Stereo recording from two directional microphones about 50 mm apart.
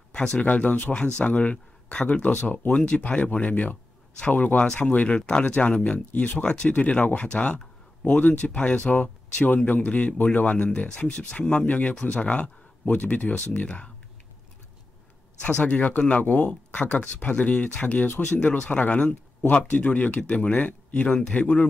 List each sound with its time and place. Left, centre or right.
0.1 s speech: centre
0.5 s speech: left
15.4 s speech: left